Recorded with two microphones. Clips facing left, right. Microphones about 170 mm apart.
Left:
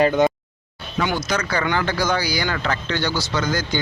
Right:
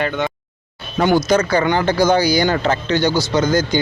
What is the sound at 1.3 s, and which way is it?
A man's voice, 25° right (ahead or behind).